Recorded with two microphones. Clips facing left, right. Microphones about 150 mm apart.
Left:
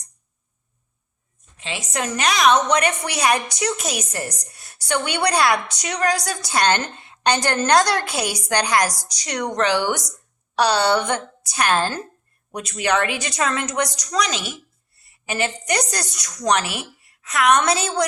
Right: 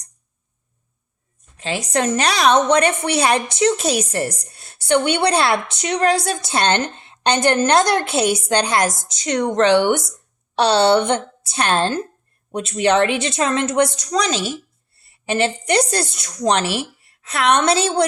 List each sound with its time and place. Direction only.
1.5 s a woman's voice: 40° right (ahead or behind)